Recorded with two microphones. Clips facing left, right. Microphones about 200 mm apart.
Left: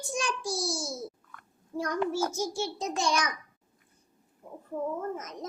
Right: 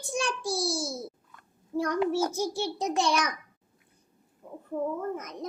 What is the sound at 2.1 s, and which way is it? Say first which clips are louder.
Speech: right 2 dB; 60° right (ahead or behind).